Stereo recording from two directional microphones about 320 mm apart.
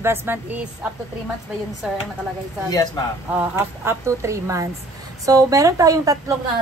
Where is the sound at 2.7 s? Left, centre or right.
Centre.